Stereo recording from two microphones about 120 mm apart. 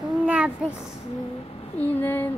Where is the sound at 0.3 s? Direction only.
10° right (ahead or behind).